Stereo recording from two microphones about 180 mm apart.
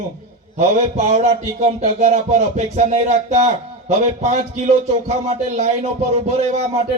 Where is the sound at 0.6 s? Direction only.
40° right (ahead or behind).